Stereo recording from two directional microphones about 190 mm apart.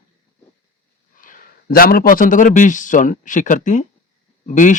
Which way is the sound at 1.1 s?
45° left (ahead or behind).